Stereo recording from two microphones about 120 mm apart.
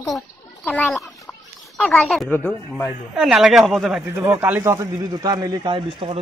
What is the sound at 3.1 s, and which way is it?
Speech, 5° right (ahead or behind).